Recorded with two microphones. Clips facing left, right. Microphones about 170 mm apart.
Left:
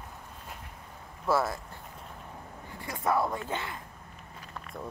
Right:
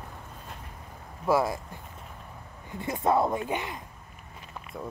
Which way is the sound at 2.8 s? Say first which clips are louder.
Right 4 dB; 25° right (ahead or behind).